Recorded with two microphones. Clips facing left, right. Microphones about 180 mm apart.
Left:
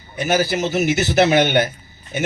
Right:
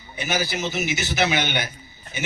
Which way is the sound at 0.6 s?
40° left (ahead or behind).